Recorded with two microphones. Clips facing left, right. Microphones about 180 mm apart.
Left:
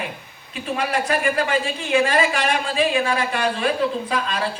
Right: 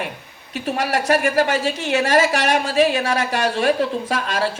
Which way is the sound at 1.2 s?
45° right (ahead or behind).